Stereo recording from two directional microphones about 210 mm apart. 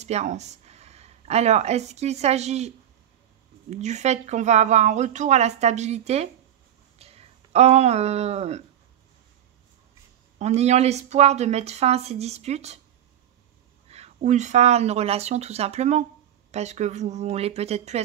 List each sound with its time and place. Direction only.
0.0 s speech: 35° right (ahead or behind)
3.7 s speech: 35° right (ahead or behind)
10.4 s speech: 30° right (ahead or behind)
13.8 s speech: 30° right (ahead or behind)